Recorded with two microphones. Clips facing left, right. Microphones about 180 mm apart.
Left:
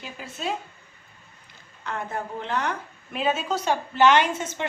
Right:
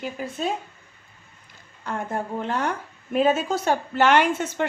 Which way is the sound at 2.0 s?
45° right (ahead or behind).